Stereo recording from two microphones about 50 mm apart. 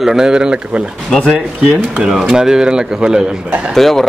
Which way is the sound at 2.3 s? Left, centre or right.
Centre.